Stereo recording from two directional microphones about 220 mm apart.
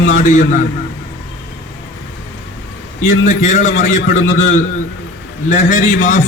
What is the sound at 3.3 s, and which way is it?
A man's voice, 35° left (ahead or behind).